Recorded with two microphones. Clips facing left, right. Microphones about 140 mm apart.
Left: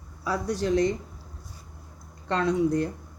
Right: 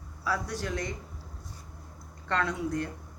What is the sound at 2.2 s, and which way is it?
Speech, 20° left (ahead or behind).